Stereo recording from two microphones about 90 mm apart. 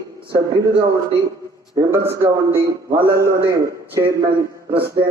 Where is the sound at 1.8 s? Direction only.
30° right (ahead or behind).